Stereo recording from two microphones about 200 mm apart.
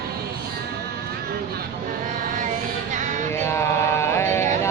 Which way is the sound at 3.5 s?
15° left (ahead or behind).